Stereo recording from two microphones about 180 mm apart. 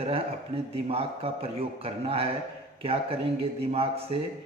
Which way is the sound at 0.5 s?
35° right (ahead or behind).